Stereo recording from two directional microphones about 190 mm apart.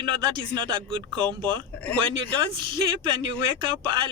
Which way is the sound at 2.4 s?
25° right (ahead or behind).